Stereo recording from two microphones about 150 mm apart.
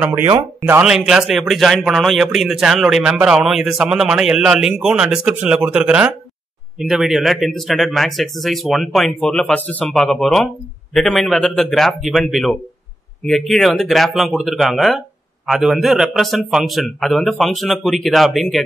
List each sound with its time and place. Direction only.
0.0 s speech: 15° right (ahead or behind)
0.8 s speech: 5° right (ahead or behind)